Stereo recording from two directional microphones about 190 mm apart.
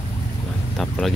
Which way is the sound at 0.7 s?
Centre (ahead or behind).